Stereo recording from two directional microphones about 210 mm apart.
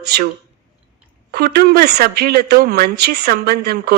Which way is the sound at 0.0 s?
50° right (ahead or behind).